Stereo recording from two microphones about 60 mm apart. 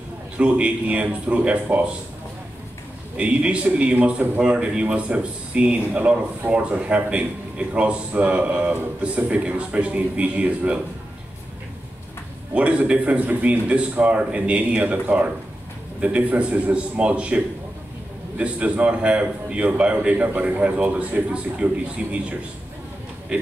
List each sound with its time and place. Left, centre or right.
0.4 s a man's voice: right
3.2 s a man's voice: right
12.5 s a man's voice: centre
18.4 s a man's voice: right
23.3 s speech: centre